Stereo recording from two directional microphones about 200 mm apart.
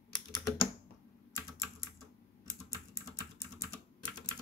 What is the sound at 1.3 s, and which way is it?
Typing, 15° left (ahead or behind).